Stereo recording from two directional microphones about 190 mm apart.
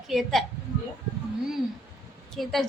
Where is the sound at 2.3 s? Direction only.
Centre (ahead or behind).